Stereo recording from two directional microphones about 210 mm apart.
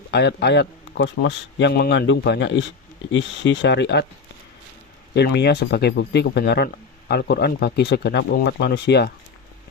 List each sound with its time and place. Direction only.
0.1 s a man's voice: 55° left (ahead or behind)
5.1 s speech: 50° left (ahead or behind)